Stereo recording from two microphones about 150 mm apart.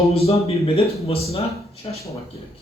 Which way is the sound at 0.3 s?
40° left (ahead or behind).